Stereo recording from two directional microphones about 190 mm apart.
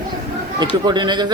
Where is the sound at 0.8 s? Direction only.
25° right (ahead or behind).